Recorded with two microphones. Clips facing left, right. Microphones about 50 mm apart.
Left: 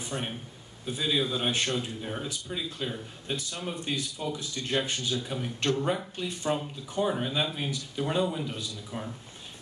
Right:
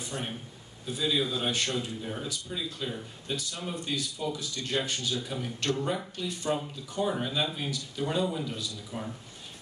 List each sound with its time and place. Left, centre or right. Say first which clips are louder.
0.0 s a sound: left 2 dB; left
0.9 s speech: even; left
7.0 s speech: left 1 dB; centre